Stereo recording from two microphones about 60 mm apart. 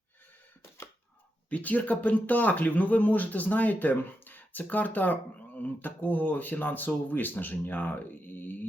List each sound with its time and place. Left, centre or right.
1.5 s speech: left